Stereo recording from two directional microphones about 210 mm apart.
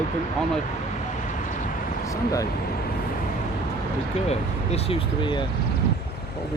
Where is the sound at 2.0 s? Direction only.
15° left (ahead or behind).